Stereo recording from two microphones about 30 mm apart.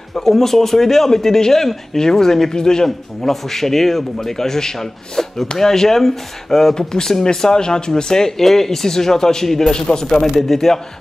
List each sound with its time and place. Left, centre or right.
0.2 s speech: centre
6.7 s speech: left
10.3 s speech: centre